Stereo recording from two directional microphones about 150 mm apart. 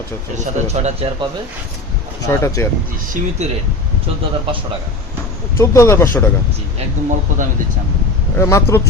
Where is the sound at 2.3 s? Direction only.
15° left (ahead or behind).